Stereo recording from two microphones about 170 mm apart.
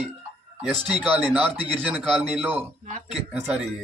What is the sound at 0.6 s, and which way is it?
A man's voice, centre (ahead or behind).